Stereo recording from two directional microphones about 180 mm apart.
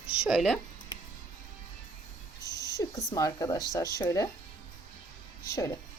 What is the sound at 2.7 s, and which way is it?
Speech, 20° left (ahead or behind).